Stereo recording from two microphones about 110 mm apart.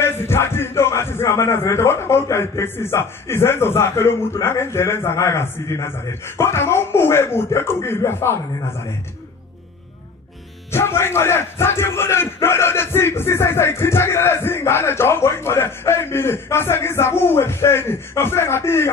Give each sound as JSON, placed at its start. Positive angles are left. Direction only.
{"t": 0.0, "sound": "speech", "side_deg": 20}
{"t": 10.7, "sound": "speech", "side_deg": 20}